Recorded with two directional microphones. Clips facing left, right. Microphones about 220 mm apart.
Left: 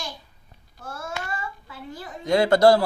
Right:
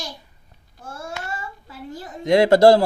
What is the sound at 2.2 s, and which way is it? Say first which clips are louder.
Speech: right 4 dB; 25° right (ahead or behind).